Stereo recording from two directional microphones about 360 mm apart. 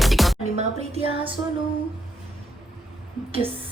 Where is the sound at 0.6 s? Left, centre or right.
Centre.